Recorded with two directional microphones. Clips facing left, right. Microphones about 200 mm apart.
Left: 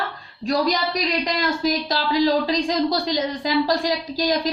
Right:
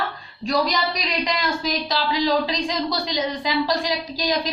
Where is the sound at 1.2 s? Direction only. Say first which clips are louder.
Left 3 dB; 50° left (ahead or behind).